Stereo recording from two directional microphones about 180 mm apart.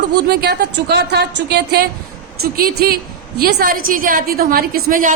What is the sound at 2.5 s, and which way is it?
A woman's voice, 55° right (ahead or behind).